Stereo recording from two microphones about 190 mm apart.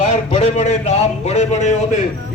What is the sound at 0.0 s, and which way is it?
Speech, 35° left (ahead or behind).